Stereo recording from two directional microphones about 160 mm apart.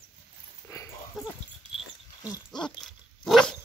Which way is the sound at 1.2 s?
Centre (ahead or behind).